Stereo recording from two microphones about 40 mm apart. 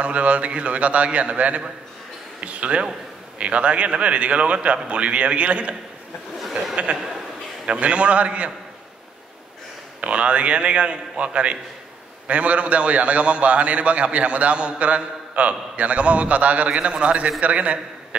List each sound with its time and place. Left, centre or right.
0.0 s a man's voice: right
6.5 s speech: centre
7.8 s a man's voice: right
9.9 s a man's voice: right